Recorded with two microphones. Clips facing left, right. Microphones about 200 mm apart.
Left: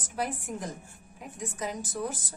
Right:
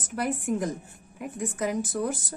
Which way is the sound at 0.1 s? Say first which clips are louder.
Right 6 dB; 60° right (ahead or behind).